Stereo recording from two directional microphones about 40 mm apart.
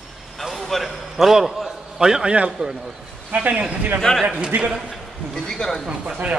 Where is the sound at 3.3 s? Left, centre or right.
Right.